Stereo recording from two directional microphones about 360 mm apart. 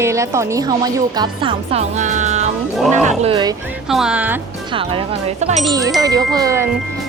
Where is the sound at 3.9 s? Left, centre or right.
Centre.